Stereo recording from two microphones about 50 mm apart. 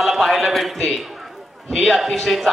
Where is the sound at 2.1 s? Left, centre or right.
Centre.